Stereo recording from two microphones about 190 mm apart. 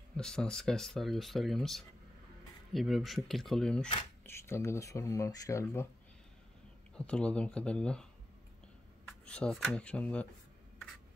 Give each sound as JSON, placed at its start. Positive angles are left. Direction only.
{"t": 0.2, "sound": "speech", "side_deg": 5}
{"t": 4.2, "sound": "speech", "side_deg": 15}
{"t": 7.0, "sound": "speech", "side_deg": 5}